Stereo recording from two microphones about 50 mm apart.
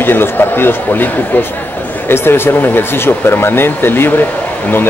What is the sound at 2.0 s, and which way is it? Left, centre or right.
A man's voice, left.